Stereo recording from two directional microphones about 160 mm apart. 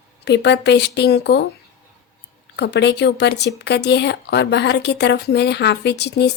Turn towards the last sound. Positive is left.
turn(degrees=90)